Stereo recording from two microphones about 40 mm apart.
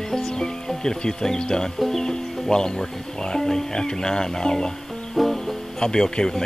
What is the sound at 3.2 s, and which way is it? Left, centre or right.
Speech, centre.